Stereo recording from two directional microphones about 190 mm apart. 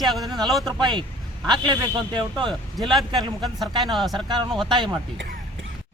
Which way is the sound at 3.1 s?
Centre (ahead or behind).